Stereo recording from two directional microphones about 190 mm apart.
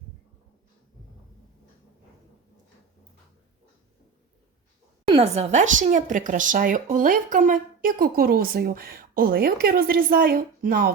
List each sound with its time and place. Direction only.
5.0 s speech: 30° right (ahead or behind); by 10.9 s 50° right (ahead or behind)